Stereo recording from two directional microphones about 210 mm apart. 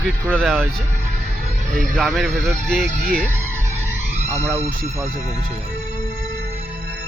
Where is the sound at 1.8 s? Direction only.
5° left (ahead or behind).